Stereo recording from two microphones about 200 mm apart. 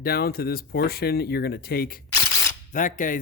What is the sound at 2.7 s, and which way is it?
Speech, 40° left (ahead or behind).